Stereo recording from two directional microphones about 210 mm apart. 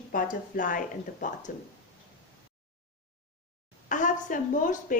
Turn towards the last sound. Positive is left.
turn(degrees=40)  # may be behind; listen again after turning